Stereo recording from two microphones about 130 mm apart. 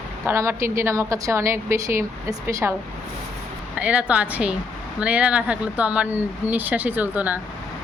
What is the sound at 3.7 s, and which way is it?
Speech, 10° right (ahead or behind).